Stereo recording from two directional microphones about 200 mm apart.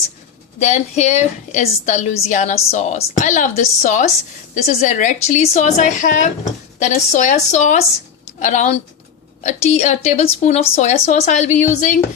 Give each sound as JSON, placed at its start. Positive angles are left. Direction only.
{"t": 0.6, "sound": "a woman's voice", "side_deg": 35}